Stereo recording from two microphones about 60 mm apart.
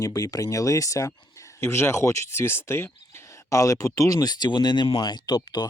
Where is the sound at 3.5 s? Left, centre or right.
Left.